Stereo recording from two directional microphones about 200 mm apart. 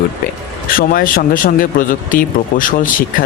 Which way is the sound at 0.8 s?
45° left (ahead or behind).